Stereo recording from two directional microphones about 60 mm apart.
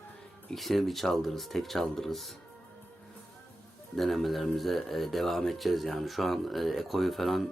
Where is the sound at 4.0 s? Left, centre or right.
Centre.